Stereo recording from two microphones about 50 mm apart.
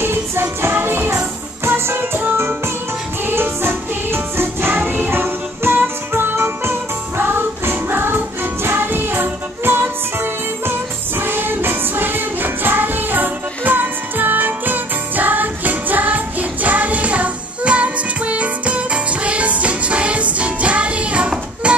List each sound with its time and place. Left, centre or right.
0.0 s music: right
3.3 s music: right
11.1 s music: right